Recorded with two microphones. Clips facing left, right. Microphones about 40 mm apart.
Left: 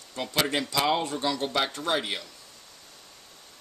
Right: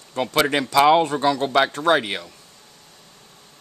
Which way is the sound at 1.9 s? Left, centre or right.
Right.